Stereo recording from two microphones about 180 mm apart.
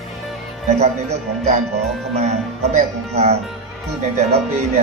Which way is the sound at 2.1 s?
40° right (ahead or behind).